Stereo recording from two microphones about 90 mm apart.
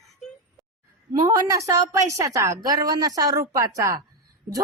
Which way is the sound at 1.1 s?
40° right (ahead or behind).